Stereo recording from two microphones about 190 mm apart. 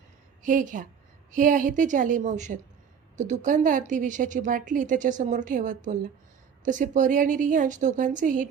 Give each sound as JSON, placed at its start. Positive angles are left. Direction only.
{"t": 0.4, "sound": "a woman's voice", "side_deg": -45}